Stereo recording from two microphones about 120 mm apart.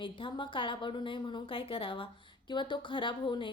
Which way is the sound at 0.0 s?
45° left (ahead or behind).